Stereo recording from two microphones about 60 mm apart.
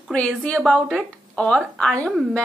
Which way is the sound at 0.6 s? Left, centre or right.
Centre.